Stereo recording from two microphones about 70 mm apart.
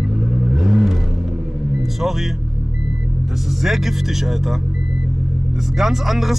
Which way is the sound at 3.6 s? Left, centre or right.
Centre.